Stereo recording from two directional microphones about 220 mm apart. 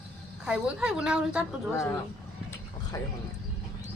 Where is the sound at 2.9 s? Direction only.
15° left (ahead or behind).